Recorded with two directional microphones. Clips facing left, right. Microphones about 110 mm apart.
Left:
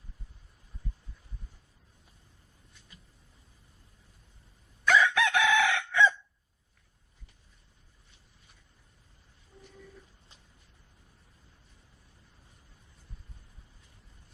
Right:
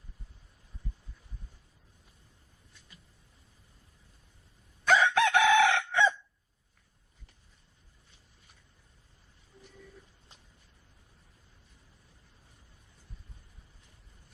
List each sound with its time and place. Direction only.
4.9 s chicken: 35° right (ahead or behind)